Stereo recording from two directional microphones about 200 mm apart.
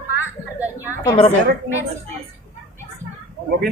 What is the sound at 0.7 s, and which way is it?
Speech, 15° left (ahead or behind).